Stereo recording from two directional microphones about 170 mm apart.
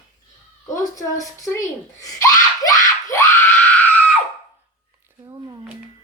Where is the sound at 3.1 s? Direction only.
15° left (ahead or behind).